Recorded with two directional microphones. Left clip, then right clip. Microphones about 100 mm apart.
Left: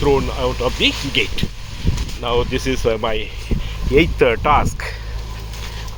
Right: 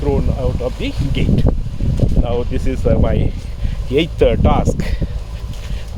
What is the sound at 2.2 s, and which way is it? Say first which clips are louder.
Speech: left 5 dB; 25° right (ahead or behind).